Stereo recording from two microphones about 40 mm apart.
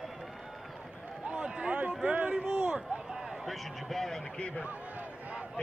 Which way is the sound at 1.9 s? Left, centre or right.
Right.